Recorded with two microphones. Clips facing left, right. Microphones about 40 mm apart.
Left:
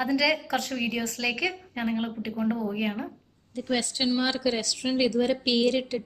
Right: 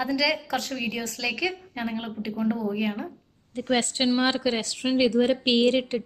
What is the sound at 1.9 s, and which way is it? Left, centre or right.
Speech, left.